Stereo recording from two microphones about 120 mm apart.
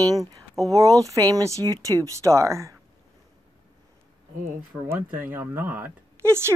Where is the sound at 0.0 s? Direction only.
30° right (ahead or behind).